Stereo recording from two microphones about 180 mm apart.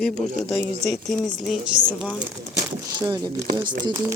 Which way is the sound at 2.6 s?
20° right (ahead or behind).